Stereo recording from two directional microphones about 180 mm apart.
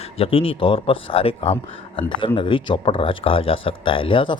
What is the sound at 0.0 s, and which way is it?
A man's voice, 30° left (ahead or behind).